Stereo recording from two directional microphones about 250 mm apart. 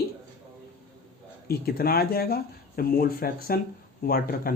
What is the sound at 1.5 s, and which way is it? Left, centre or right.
Speech, left.